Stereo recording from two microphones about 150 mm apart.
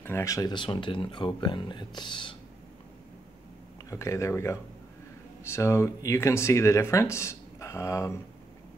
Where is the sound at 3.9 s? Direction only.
20° left (ahead or behind).